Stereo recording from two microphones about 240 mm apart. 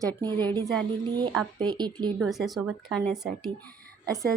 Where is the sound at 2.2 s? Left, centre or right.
Centre.